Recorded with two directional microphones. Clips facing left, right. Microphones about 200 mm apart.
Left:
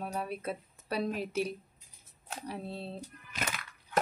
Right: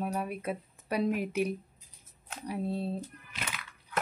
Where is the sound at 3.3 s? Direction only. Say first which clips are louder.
Left 4 dB; 45° left (ahead or behind).